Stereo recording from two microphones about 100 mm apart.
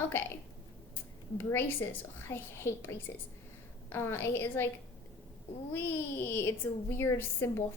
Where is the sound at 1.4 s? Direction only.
20° left (ahead or behind).